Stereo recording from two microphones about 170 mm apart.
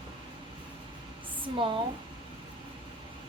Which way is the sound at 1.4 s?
30° right (ahead or behind).